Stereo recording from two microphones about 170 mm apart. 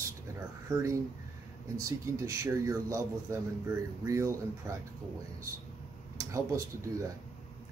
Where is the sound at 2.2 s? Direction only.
20° right (ahead or behind).